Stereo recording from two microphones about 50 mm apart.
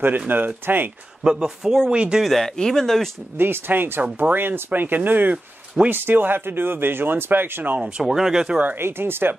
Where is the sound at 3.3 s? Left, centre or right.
Right.